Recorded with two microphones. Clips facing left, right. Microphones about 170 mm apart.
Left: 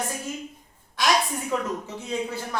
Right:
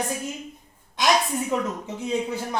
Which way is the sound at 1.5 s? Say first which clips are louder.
Right 1 dB; 20° right (ahead or behind).